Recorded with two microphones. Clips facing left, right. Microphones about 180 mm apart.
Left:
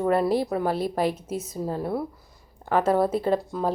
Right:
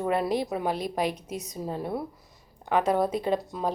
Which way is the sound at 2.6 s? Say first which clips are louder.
Left 3 dB; 15° right (ahead or behind).